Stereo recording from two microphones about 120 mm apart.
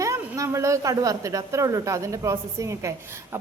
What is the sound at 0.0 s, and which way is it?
A woman's voice, 25° right (ahead or behind).